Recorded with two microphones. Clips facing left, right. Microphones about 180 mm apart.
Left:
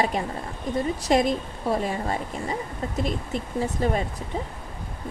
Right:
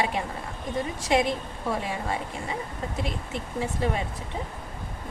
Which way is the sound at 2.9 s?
40° left (ahead or behind).